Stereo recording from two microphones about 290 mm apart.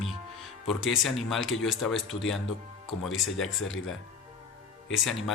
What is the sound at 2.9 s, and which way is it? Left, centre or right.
Speech, left.